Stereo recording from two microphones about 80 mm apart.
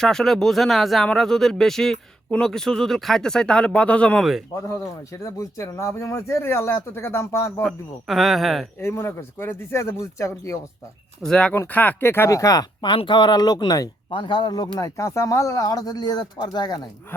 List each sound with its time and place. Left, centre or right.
0.0 s speech: centre
4.2 s a man's voice: centre
4.5 s speech: left
7.6 s a man's voice: centre
8.8 s speech: left
11.3 s speech: centre
11.7 s speech: left
12.3 s speech: left
12.8 s speech: left
14.1 s speech: left